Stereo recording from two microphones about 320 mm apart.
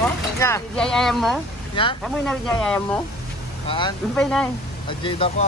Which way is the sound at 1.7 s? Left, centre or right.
Centre.